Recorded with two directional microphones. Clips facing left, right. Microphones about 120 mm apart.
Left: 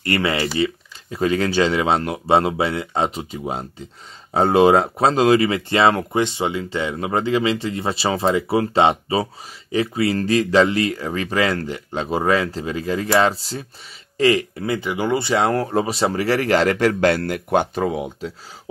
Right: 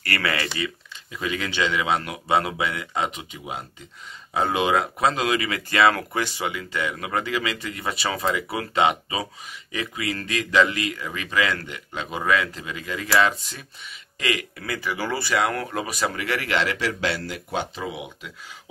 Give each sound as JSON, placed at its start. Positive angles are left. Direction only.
{"t": 0.0, "sound": "speech", "side_deg": 25}
{"t": 1.1, "sound": "speech", "side_deg": 40}